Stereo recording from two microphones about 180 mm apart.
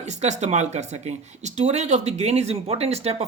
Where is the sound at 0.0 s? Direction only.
40° right (ahead or behind).